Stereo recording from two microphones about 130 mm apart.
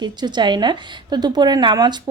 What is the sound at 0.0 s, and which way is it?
A woman's voice, 35° right (ahead or behind).